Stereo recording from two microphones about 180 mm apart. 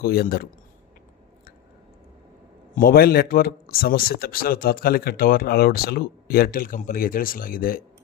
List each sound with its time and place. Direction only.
0.0 s speech: 55° left (ahead or behind)
2.7 s speech: 55° left (ahead or behind)